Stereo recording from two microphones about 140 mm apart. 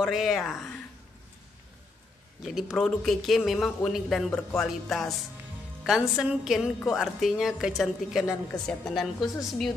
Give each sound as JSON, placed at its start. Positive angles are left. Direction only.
{"t": 0.0, "sound": "a man's voice", "side_deg": 0}
{"t": 2.4, "sound": "a man's voice", "side_deg": 0}
{"t": 4.3, "sound": "speech", "side_deg": 15}
{"t": 4.6, "sound": "a man's voice", "side_deg": 0}